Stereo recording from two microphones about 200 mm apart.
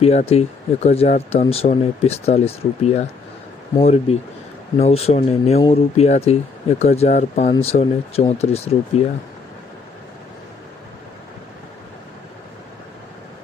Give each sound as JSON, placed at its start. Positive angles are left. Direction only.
{"t": 0.0, "sound": "speech", "side_deg": 30}